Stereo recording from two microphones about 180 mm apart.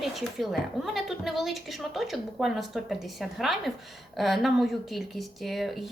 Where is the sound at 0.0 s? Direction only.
Centre (ahead or behind).